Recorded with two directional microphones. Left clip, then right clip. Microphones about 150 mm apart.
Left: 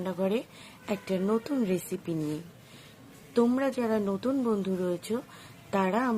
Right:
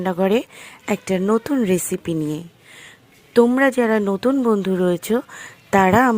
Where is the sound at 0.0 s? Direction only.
70° right (ahead or behind).